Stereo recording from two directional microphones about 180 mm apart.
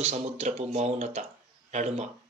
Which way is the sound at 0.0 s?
40° right (ahead or behind).